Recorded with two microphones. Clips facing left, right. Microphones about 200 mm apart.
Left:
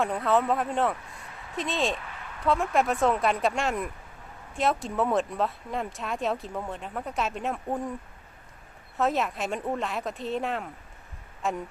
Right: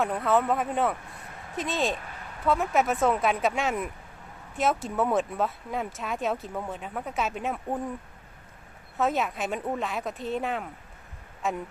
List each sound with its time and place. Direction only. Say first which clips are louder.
0.0 s speech: even; centre (ahead or behind)
2.0 s a sound: even; 40° right (ahead or behind)
2.5 s speech: even; centre (ahead or behind)
9.0 s speech: even; centre (ahead or behind)